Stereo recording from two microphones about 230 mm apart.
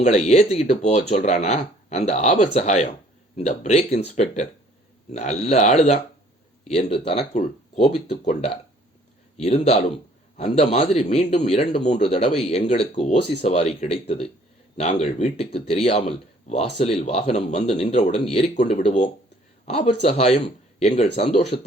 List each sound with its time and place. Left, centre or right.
0.0 s speech: left